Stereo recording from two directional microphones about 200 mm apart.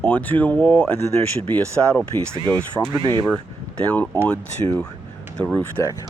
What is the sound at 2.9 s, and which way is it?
Speech, 20° right (ahead or behind).